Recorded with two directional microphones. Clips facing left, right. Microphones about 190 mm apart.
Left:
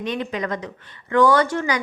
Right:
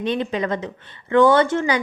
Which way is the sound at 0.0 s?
30° right (ahead or behind).